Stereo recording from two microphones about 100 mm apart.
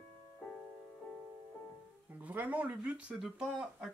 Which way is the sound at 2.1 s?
15° right (ahead or behind).